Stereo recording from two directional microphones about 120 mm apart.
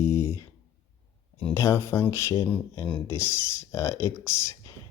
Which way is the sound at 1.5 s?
25° left (ahead or behind).